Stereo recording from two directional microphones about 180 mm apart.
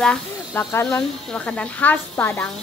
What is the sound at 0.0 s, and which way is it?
Speech, 5° left (ahead or behind).